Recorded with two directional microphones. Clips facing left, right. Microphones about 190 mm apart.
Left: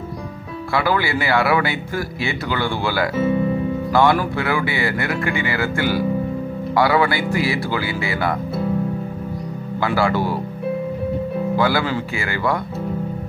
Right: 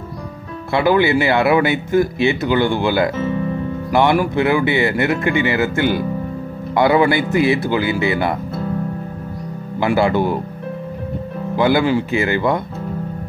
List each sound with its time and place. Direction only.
0.7 s speech: 20° right (ahead or behind)
3.2 s speech: 10° left (ahead or behind)
3.9 s speech: 20° right (ahead or behind)
9.8 s speech: 20° right (ahead or behind)
11.5 s speech: 20° right (ahead or behind)